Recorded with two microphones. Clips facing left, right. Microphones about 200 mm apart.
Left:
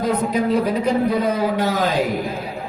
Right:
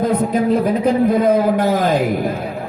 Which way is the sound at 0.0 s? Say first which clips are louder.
Right 3 dB; 50° right (ahead or behind).